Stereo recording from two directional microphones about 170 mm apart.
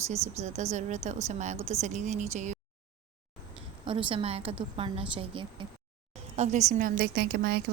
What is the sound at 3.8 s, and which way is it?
A woman's voice, 30° right (ahead or behind).